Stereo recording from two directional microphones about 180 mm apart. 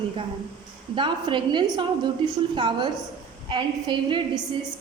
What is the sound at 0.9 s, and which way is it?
A woman's voice, 25° right (ahead or behind).